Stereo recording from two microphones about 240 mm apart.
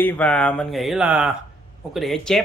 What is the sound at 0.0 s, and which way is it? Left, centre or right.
Speech, centre.